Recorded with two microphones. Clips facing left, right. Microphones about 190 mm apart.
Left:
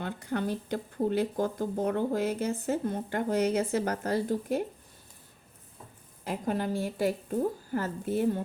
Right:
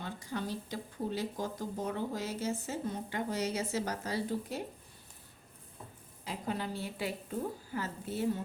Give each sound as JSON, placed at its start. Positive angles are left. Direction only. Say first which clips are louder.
{"t": 0.0, "sound": "speech", "louder": "left 7 dB", "side_deg": 60}
{"t": 6.2, "sound": "a woman's voice", "louder": "left 6 dB", "side_deg": 50}